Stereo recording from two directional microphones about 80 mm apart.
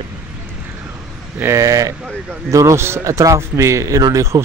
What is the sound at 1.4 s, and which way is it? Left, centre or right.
Speech, right.